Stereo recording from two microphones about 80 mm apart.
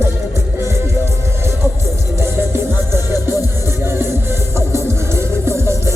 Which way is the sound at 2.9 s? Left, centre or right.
Right.